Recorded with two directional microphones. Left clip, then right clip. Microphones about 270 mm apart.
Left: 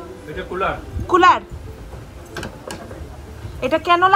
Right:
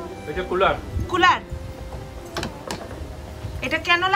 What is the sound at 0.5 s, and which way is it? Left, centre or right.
Speech, centre.